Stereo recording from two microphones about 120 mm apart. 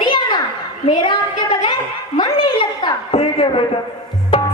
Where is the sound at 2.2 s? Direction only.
40° left (ahead or behind).